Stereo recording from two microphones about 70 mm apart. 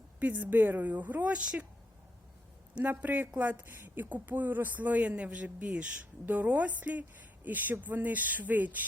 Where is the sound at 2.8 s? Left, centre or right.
Right.